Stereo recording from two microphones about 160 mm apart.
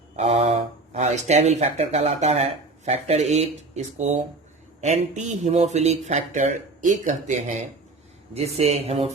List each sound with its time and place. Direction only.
0.2 s mantra: 40° right (ahead or behind)
0.9 s speech: 45° right (ahead or behind)
8.3 s speech: 40° right (ahead or behind)